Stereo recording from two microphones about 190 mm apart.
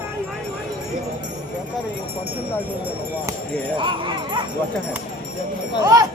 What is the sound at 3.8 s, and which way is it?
Speech, 25° right (ahead or behind).